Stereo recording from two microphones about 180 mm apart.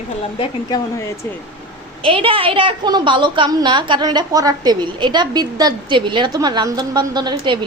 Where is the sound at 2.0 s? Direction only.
30° right (ahead or behind).